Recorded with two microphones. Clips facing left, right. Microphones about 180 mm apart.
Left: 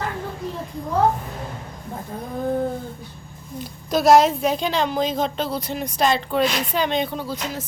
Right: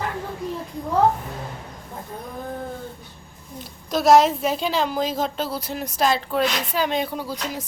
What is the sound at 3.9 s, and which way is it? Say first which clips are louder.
A woman's voice: left 1 dB; centre (ahead or behind).